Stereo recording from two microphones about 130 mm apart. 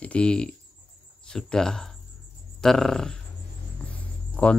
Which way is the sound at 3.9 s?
10° left (ahead or behind).